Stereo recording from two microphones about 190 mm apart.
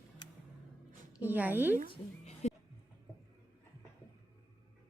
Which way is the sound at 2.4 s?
35° left (ahead or behind).